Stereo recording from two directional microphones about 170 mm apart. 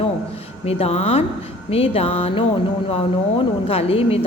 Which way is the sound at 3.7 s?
35° left (ahead or behind).